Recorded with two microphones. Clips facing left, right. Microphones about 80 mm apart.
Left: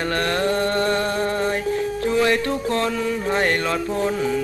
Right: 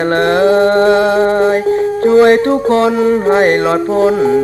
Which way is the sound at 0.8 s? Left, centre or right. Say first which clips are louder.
Right 12 dB; right.